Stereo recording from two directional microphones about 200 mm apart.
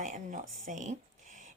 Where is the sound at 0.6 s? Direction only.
40° right (ahead or behind).